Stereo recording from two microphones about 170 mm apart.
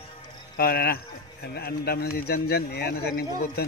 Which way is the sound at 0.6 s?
65° left (ahead or behind).